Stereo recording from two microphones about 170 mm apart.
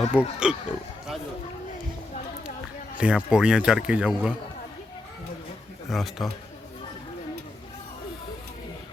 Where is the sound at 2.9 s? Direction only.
5° right (ahead or behind).